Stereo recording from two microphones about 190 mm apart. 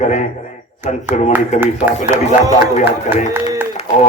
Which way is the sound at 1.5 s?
35° left (ahead or behind).